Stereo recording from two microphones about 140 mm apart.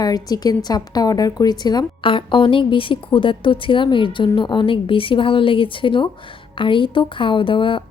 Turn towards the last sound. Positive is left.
turn(degrees=35)  # may be behind; listen again after turning